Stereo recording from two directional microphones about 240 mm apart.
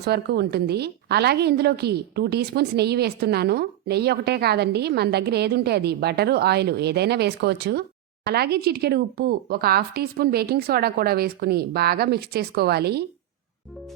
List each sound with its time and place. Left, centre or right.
0.0 s a woman's voice: right